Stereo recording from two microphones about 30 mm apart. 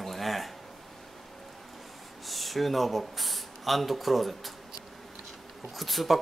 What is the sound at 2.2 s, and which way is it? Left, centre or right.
Speech, centre.